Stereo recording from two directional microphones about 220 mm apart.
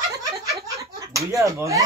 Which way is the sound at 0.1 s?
15° right (ahead or behind).